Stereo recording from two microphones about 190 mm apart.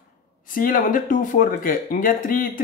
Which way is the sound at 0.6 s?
50° left (ahead or behind).